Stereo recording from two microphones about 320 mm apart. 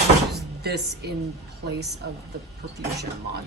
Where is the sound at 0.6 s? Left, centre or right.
Right.